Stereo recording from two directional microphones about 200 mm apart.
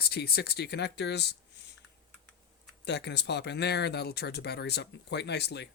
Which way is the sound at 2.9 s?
60° left (ahead or behind).